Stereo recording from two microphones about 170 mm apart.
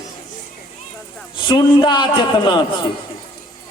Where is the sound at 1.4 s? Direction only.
25° left (ahead or behind).